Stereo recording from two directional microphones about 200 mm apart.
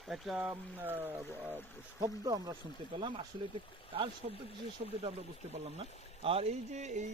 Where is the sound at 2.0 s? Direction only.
20° right (ahead or behind).